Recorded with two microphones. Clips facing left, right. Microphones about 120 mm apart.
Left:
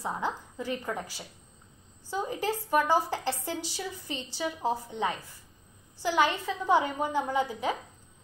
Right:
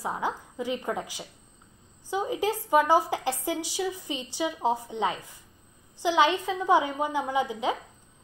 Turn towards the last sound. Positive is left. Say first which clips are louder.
# right 2 dB
turn(degrees=-15)  # may be behind; listen again after turning